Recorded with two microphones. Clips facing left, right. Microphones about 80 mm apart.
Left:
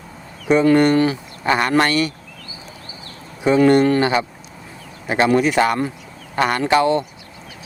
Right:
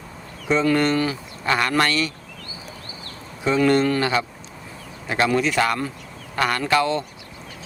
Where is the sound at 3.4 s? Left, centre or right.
Centre.